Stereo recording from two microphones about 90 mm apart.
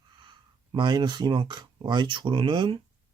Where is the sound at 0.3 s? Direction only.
55° right (ahead or behind).